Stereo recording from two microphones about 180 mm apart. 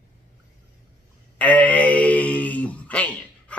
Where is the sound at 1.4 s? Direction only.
10° left (ahead or behind).